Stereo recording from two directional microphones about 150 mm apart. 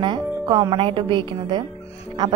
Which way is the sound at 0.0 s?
30° right (ahead or behind).